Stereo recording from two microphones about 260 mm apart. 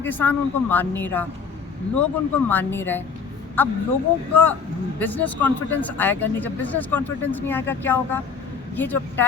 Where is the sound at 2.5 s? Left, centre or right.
Centre.